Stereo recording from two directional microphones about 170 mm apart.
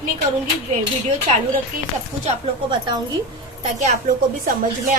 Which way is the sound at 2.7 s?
25° right (ahead or behind).